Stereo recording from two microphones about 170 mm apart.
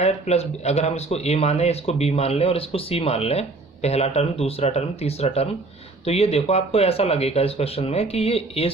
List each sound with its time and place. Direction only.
0.0 s speech: 40° left (ahead or behind)